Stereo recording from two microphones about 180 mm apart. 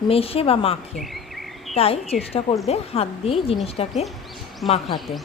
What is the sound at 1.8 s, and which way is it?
A woman's voice, 35° left (ahead or behind).